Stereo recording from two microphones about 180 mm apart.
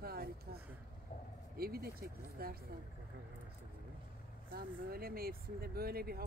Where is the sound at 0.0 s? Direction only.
55° right (ahead or behind).